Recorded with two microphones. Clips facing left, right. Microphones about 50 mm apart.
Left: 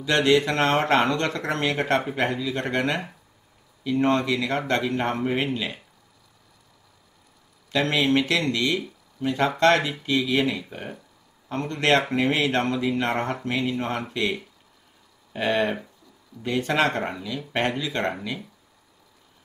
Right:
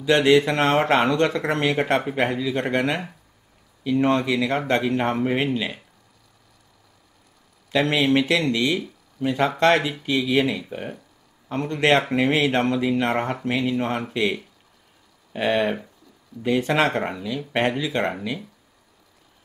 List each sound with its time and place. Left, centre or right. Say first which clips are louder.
0.0 s speech: right 3 dB; centre
3.8 s speech: right 2 dB; centre
7.7 s speech: right 2 dB; right
10.2 s speech: right 2 dB; centre
11.4 s speech: right 3 dB; centre
15.3 s speech: right 2 dB; centre
16.4 s speech: right 2 dB; right
17.2 s speech: right 3 dB; centre